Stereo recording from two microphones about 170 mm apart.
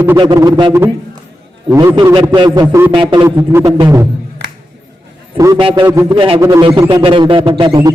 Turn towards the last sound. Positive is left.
turn(degrees=-25)  # may be behind; listen again after turning